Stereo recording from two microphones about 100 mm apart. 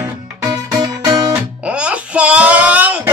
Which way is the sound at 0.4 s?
40° right (ahead or behind).